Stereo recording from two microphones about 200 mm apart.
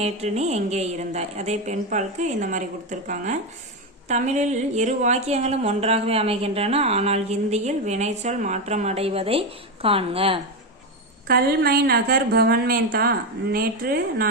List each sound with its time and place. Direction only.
0.0 s speech: 35° right (ahead or behind)
11.3 s a woman's voice: 50° right (ahead or behind)